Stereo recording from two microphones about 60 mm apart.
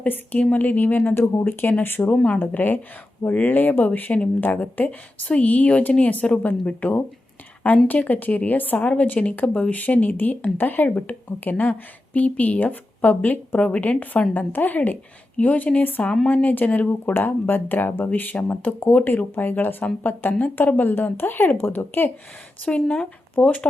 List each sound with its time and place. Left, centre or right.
0.0 s speech: left
7.9 s speech: left
22.6 s speech: left